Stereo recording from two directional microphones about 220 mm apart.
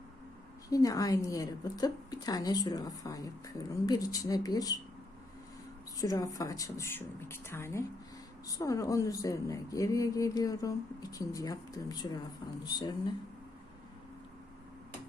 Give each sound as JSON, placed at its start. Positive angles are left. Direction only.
{"t": 0.7, "sound": "a woman's voice", "side_deg": 15}
{"t": 6.0, "sound": "a woman's voice", "side_deg": 15}